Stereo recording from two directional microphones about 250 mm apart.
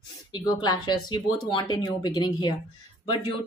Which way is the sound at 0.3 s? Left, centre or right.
Centre.